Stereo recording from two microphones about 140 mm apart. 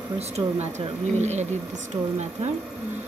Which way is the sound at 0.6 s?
55° right (ahead or behind).